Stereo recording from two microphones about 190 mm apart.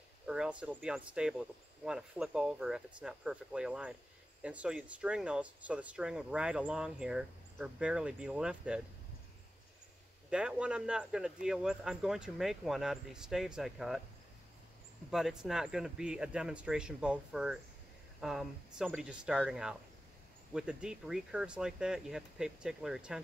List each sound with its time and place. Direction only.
0.3 s speech: 5° right (ahead or behind)
10.3 s speech: 5° right (ahead or behind)
15.0 s speech: 5° right (ahead or behind)